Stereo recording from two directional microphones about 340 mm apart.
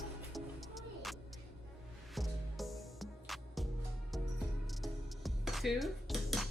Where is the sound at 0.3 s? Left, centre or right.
Centre.